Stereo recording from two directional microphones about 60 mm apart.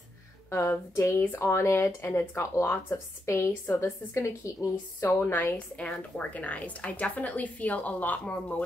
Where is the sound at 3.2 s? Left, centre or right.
Left.